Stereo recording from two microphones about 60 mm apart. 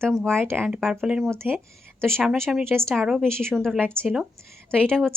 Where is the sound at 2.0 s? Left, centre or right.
Centre.